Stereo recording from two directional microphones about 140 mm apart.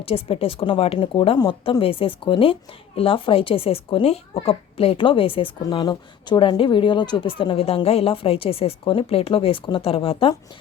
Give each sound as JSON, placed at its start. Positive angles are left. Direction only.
{"t": 0.0, "sound": "a woman's voice", "side_deg": 40}
{"t": 5.6, "sound": "a woman's voice", "side_deg": 30}